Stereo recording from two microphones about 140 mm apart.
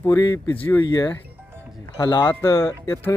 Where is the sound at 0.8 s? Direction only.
30° left (ahead or behind).